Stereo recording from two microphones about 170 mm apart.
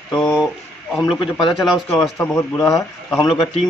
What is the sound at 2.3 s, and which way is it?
Speech, 15° left (ahead or behind).